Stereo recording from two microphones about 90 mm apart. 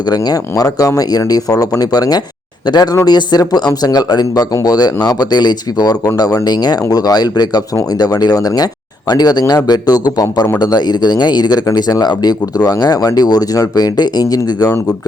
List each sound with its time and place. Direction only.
0.1 s speech: 45° left (ahead or behind)